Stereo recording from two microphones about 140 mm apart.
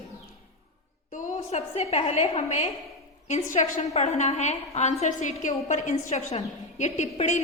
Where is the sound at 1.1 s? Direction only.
60° left (ahead or behind).